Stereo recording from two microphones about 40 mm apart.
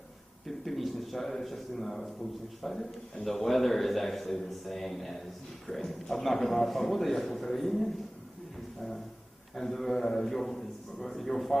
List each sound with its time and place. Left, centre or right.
0.4 s a sound: centre
2.6 s a man's voice: centre
9.6 s a man's voice: centre